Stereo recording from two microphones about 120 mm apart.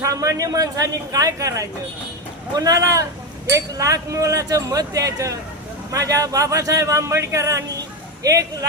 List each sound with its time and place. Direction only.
0.0 s speech: 30° right (ahead or behind)